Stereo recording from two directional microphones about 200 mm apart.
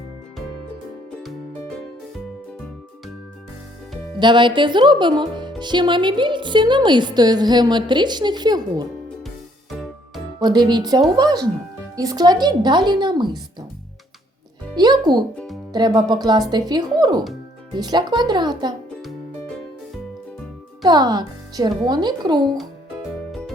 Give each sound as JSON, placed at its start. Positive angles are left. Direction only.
{"t": 4.2, "sound": "speech", "side_deg": -25}
{"t": 10.4, "sound": "speech", "side_deg": -20}
{"t": 14.8, "sound": "speech", "side_deg": -20}
{"t": 20.8, "sound": "speech", "side_deg": -20}